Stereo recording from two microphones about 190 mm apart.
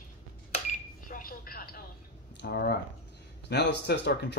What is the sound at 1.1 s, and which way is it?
Telephone, 50° left (ahead or behind).